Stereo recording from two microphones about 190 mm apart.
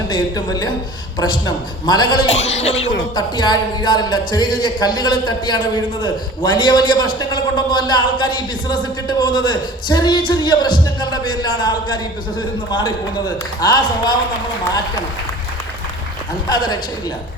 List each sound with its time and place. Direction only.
0.1 s speech: 20° left (ahead or behind)
3.2 s speech: 20° left (ahead or behind)
16.5 s speech: 20° left (ahead or behind)